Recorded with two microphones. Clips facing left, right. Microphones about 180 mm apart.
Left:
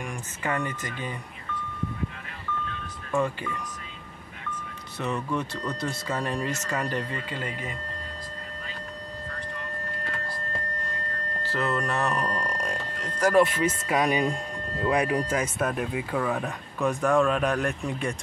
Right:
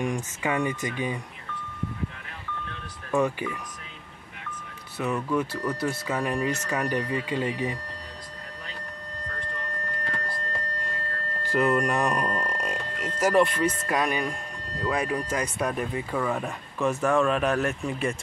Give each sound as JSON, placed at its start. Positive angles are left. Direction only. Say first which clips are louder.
{"t": 0.0, "sound": "speech", "louder": "right 5 dB", "side_deg": -15}
{"t": 3.2, "sound": "speech", "louder": "right 2 dB", "side_deg": -15}
{"t": 4.9, "sound": "speech", "louder": "right 3 dB", "side_deg": -5}
{"t": 11.5, "sound": "speech", "louder": "right 5 dB", "side_deg": -15}
{"t": 13.4, "sound": "speech", "louder": "left 2 dB", "side_deg": 5}
{"t": 15.3, "sound": "speech", "louder": "left 1 dB", "side_deg": 5}